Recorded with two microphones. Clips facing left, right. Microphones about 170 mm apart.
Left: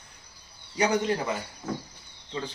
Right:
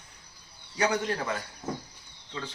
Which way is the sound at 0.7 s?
15° left (ahead or behind).